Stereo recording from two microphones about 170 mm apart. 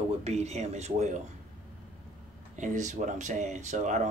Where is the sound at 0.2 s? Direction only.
40° right (ahead or behind).